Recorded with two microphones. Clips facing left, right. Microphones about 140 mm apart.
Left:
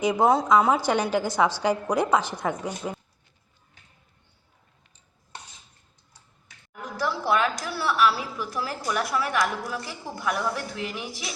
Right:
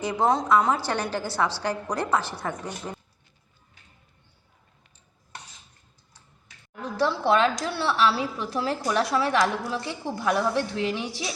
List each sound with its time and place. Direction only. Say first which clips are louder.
0.0 s a woman's voice: left 3 dB; 10° left (ahead or behind)
7.0 s a woman's voice: right 3 dB; 30° right (ahead or behind)